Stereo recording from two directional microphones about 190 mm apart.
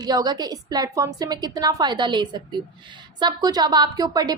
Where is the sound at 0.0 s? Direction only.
20° right (ahead or behind).